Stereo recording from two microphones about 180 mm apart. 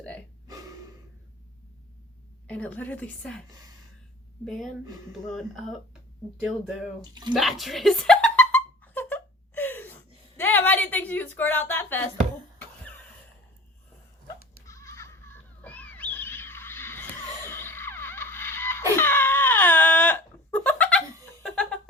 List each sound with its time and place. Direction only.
0.4 s burping: 20° right (ahead or behind)
2.5 s a woman's voice: 10° left (ahead or behind)
4.4 s speech: centre (ahead or behind)
7.1 s speech: 25° right (ahead or behind)
7.3 s a sound: centre (ahead or behind)
12.5 s cough: 10° left (ahead or behind)
14.7 s neigh: 15° left (ahead or behind)
21.4 s music: 5° left (ahead or behind)